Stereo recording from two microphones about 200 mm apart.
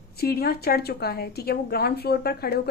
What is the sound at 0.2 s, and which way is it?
Speech, 50° left (ahead or behind).